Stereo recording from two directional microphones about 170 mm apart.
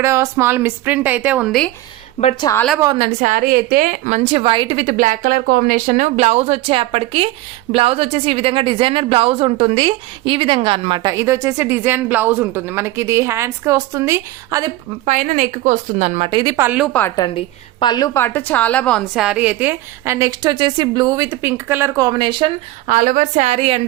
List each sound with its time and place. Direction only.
0.0 s a woman's voice: 15° right (ahead or behind); by 1.7 s centre (ahead or behind)
2.2 s a woman's voice: 40° left (ahead or behind)
2.8 s a woman's voice: 25° right (ahead or behind)
3.1 s a woman's voice: 45° right (ahead or behind); by 14.7 s 20° right (ahead or behind)
15.0 s a woman's voice: 45° right (ahead or behind)
16.3 s a woman's voice: 25° right (ahead or behind)
16.6 s a woman's voice: 5° right (ahead or behind)
17.2 s a woman's voice: 30° left (ahead or behind); by 22.5 s 30° right (ahead or behind)
22.9 s a woman's voice: 55° right (ahead or behind); by 23.8 s 35° right (ahead or behind)